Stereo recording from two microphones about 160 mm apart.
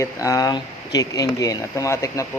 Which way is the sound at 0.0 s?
20° left (ahead or behind).